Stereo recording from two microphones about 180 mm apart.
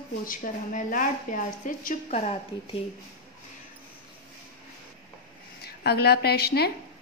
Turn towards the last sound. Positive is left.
turn(degrees=60)  # may be behind; listen again after turning